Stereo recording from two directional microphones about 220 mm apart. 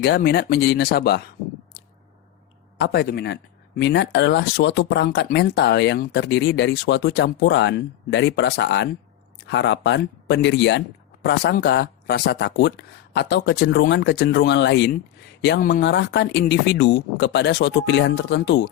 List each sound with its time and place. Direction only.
0.0 s speech: 45° left (ahead or behind)
2.7 s speech: 50° left (ahead or behind)